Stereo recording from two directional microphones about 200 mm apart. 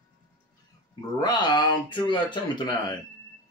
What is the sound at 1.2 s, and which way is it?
Speech, 20° left (ahead or behind).